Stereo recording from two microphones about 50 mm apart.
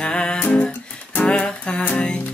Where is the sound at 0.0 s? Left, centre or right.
Centre.